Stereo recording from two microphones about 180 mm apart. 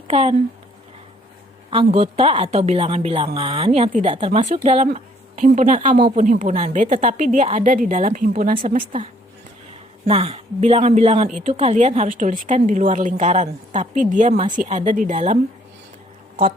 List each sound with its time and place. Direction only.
0.1 s a woman's voice: 35° right (ahead or behind)
1.7 s a woman's voice: 35° right (ahead or behind)
10.1 s a woman's voice: 35° right (ahead or behind)